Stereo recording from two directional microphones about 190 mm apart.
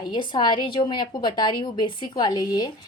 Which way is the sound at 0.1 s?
25° left (ahead or behind).